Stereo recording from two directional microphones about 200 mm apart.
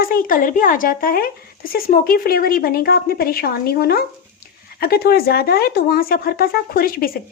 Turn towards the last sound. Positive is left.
turn(degrees=45)  # may be behind; listen again after turning